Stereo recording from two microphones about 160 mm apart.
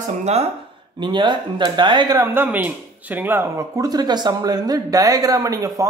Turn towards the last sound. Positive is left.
turn(degrees=-20)  # may be behind; listen again after turning